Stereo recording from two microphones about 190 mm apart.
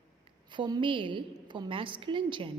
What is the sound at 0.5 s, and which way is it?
A woman's voice, 25° right (ahead or behind).